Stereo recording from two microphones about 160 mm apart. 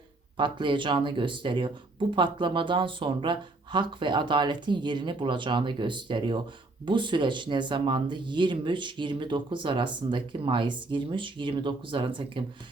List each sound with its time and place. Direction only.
0.3 s speech: 30° right (ahead or behind)